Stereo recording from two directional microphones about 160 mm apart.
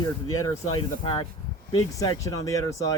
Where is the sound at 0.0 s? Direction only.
30° left (ahead or behind).